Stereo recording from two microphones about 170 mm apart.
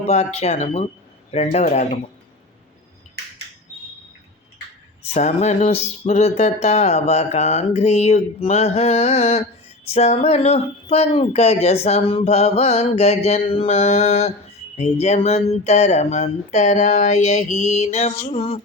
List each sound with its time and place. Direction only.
0.0 s speech: 40° left (ahead or behind)
5.1 s speech: 45° left (ahead or behind)